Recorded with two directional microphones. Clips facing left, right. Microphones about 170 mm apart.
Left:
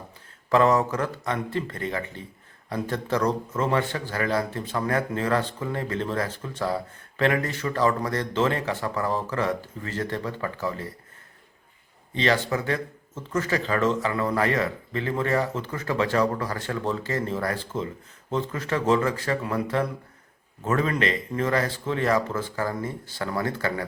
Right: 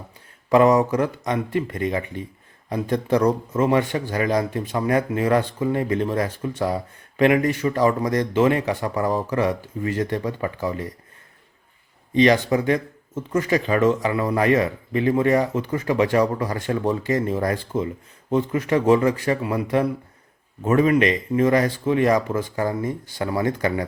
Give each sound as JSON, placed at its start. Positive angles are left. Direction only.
{"t": 0.5, "sound": "speech", "side_deg": -15}
{"t": 12.1, "sound": "speech", "side_deg": -15}